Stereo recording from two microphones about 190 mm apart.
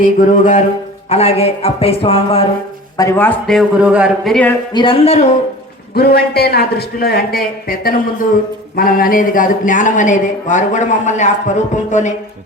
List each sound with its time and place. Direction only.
0.0 s speech: 45° left (ahead or behind)
3.0 s a man's voice: 15° left (ahead or behind)
4.7 s speech: 25° left (ahead or behind)
5.9 s a man's voice: 55° left (ahead or behind); by 12.1 s 40° left (ahead or behind)